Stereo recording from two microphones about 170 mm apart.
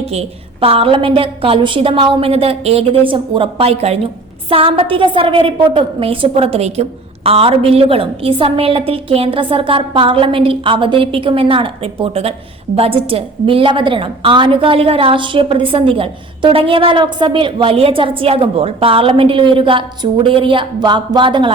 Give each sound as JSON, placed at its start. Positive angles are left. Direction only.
{"t": 0.1, "sound": "a woman's voice", "side_deg": -35}